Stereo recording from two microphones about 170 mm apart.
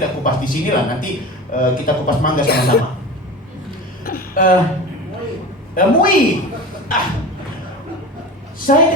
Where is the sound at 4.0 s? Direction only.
60° left (ahead or behind).